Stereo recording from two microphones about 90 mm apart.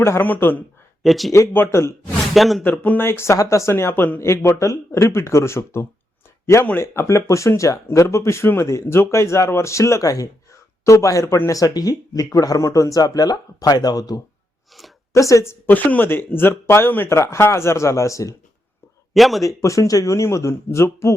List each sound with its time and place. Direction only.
0.0 s speech: 25° left (ahead or behind)
1.0 s speech: centre (ahead or behind)
1.3 s speech: 30° left (ahead or behind)
2.3 s speech: centre (ahead or behind)
2.6 s speech: 20° left (ahead or behind); by 14.2 s 45° left (ahead or behind)
14.7 s speech: centre (ahead or behind)
15.1 s a woman's voice: 35° left (ahead or behind)
15.7 s speech: 20° left (ahead or behind); by 18.3 s 35° left (ahead or behind)
19.1 s speech: centre (ahead or behind)
19.4 s speech: 40° left (ahead or behind)